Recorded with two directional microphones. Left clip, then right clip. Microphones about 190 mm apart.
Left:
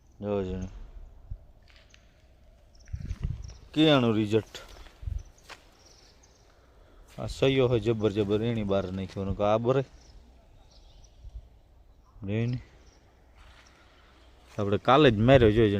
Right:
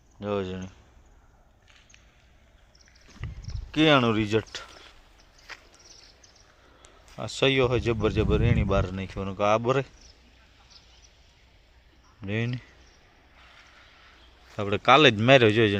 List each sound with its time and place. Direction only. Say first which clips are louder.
0.2 s speech: right 1 dB; centre (ahead or behind)
3.2 s a sound: right 1 dB; 10° left (ahead or behind)
3.7 s speech: right 2 dB; centre (ahead or behind)
5.5 s a sound: right 4 dB; centre (ahead or behind)
7.2 s speech: right 2 dB; 10° left (ahead or behind)
12.2 s speech: right 2 dB; 10° left (ahead or behind)
14.5 s speech: right 3 dB; 30° left (ahead or behind); by 15.7 s 10° left (ahead or behind)